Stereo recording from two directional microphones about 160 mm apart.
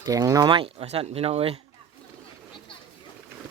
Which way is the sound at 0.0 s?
20° right (ahead or behind).